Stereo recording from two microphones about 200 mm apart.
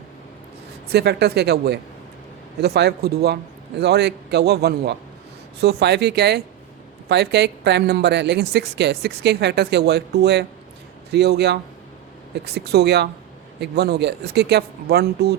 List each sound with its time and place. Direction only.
0.9 s speech: 55° right (ahead or behind)